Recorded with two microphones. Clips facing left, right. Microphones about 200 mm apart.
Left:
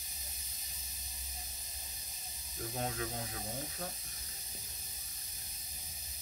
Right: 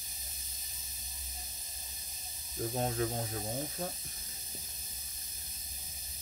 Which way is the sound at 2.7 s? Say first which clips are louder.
Right 5 dB; 35° right (ahead or behind).